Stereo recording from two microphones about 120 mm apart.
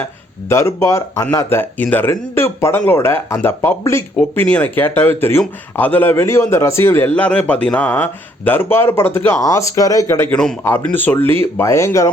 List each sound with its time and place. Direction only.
0.4 s a man's voice: 25° left (ahead or behind)
10.8 s a man's voice: 15° left (ahead or behind)